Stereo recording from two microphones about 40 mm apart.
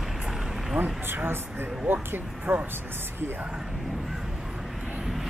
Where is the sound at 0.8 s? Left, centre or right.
Right.